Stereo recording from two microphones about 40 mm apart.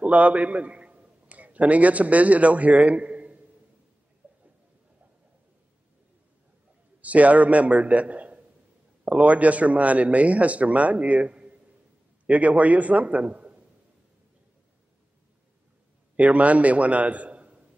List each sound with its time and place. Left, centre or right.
0.0 s a man's voice: right
4.2 s a sound: right
7.0 s a man's voice: right
16.2 s a man's voice: right